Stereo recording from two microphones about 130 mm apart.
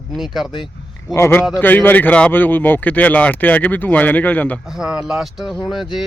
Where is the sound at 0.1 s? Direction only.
Centre (ahead or behind).